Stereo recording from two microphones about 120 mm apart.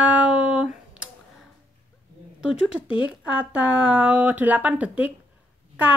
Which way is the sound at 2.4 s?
5° right (ahead or behind).